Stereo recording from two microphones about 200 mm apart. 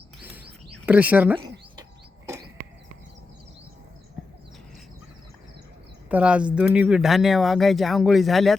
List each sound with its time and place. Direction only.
0.9 s speech: 10° right (ahead or behind)
1.4 s a sound: 20° right (ahead or behind)
6.1 s speech: 5° right (ahead or behind)